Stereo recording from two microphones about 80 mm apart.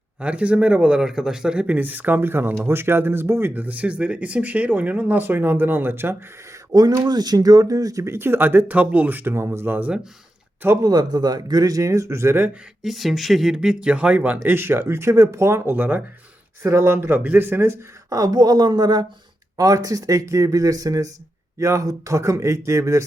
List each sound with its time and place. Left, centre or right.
0.2 s speech: centre
6.7 s speech: right
10.8 s speech: right
12.8 s speech: centre
14.4 s speech: right
16.6 s speech: right
18.1 s a woman's voice: right
19.5 s speech: right